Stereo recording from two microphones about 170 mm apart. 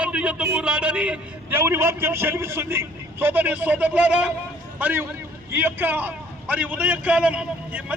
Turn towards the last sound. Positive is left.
turn(degrees=-10)  # may be behind; listen again after turning